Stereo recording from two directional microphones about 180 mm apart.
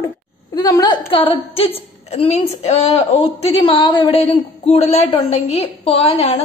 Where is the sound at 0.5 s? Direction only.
20° left (ahead or behind).